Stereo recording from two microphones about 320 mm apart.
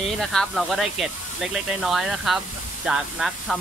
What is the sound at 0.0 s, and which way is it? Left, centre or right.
Speech, centre.